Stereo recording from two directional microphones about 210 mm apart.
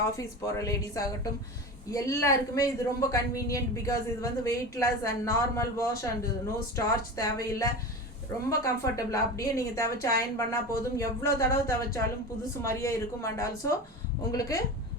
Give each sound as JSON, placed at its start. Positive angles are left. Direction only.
{"t": 0.2, "sound": "speech", "side_deg": 15}